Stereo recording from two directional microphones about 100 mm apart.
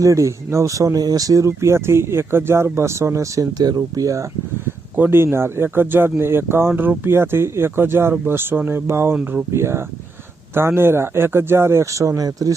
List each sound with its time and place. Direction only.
0.0 s speech: 30° right (ahead or behind)
4.9 s speech: 20° right (ahead or behind)